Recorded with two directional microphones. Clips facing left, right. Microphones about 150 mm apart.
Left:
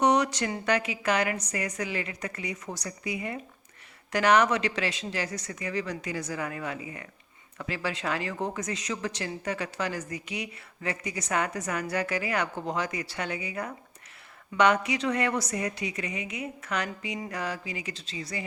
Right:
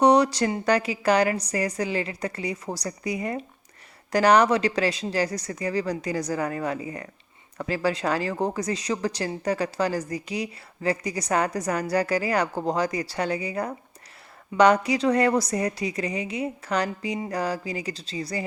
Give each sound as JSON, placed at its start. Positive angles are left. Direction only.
{"t": 0.0, "sound": "speech", "side_deg": -35}